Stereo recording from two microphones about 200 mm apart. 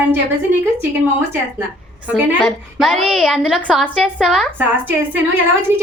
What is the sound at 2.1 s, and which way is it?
A woman's voice, 5° right (ahead or behind).